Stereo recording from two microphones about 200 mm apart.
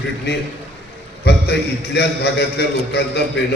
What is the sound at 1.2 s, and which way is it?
A man's voice, 55° left (ahead or behind).